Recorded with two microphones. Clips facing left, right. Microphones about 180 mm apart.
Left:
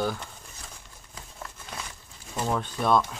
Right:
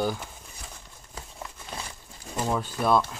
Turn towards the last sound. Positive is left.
turn(degrees=-5)  # may be behind; listen again after turning